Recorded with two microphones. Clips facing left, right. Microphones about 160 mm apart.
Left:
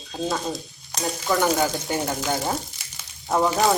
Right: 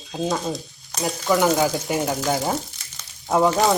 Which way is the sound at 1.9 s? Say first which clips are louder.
Right 3 dB; 15° right (ahead or behind).